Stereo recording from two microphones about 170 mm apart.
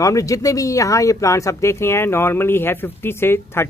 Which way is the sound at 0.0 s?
20° left (ahead or behind).